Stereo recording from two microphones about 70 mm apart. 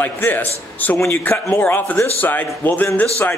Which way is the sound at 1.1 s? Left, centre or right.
Left.